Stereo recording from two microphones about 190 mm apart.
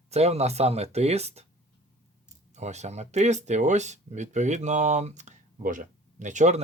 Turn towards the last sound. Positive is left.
turn(degrees=-40)  # may be behind; listen again after turning